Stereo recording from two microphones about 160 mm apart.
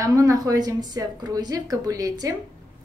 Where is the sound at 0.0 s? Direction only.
20° right (ahead or behind).